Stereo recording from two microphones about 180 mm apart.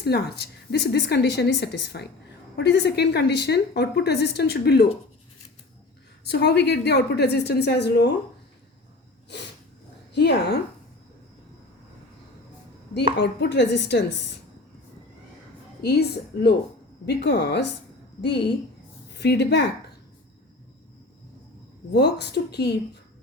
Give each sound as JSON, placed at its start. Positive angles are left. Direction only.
{"t": 0.0, "sound": "a woman's voice", "side_deg": 65}
{"t": 6.2, "sound": "a woman's voice", "side_deg": 65}
{"t": 10.1, "sound": "a woman's voice", "side_deg": 70}
{"t": 13.1, "sound": "a woman's voice", "side_deg": 70}
{"t": 15.8, "sound": "a woman's voice", "side_deg": 65}
{"t": 21.9, "sound": "a woman's voice", "side_deg": 65}